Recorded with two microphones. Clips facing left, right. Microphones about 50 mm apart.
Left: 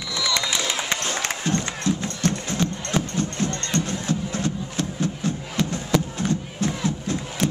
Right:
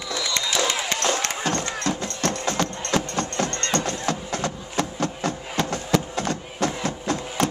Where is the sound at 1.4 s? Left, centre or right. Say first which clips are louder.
Left 1 dB; right.